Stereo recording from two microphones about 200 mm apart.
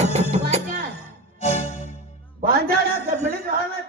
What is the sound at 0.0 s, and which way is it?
Music, 35° right (ahead or behind).